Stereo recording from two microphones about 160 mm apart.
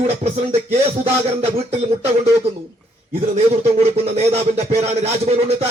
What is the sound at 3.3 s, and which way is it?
A man's voice, 45° right (ahead or behind).